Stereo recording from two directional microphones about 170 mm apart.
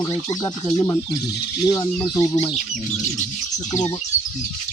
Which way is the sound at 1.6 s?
25° left (ahead or behind).